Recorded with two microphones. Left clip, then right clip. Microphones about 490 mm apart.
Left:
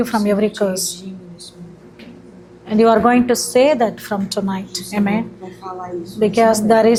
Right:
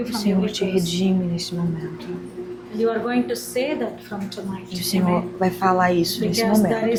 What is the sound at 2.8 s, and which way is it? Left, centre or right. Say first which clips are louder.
A woman's voice: left 9 dB; left.